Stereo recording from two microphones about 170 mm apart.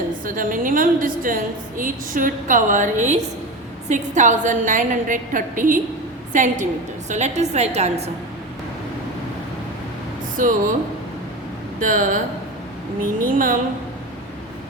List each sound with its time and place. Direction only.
0.3 s a woman's voice: 50° right (ahead or behind)
10.4 s a woman's voice: 50° right (ahead or behind)
11.8 s a woman's voice: 50° right (ahead or behind)